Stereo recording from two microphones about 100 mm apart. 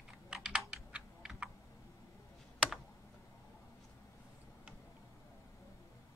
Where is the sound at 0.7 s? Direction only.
10° right (ahead or behind).